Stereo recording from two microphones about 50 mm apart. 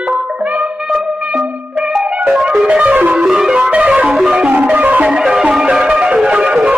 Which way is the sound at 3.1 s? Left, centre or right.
Centre.